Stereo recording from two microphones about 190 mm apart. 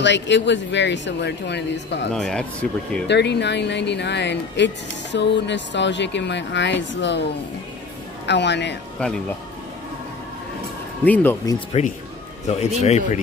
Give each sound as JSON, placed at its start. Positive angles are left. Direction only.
{"t": 0.0, "sound": "speech", "side_deg": 70}
{"t": 2.1, "sound": "speech", "side_deg": 5}
{"t": 3.1, "sound": "speech", "side_deg": 65}
{"t": 8.3, "sound": "speech", "side_deg": 65}
{"t": 9.0, "sound": "speech", "side_deg": 5}
{"t": 11.1, "sound": "speech", "side_deg": 10}
{"t": 11.7, "sound": "speech", "side_deg": 35}